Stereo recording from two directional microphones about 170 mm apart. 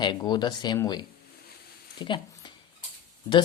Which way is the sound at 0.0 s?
25° left (ahead or behind).